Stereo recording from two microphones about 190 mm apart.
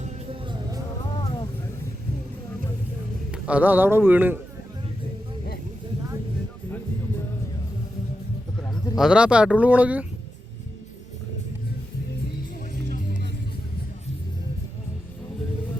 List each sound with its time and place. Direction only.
3.3 s speech: 5° right (ahead or behind)
9.0 s speech: 5° right (ahead or behind)